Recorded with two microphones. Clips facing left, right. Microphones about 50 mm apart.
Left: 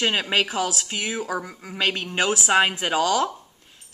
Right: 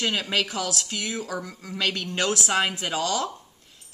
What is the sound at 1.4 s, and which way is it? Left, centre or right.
Speech, centre.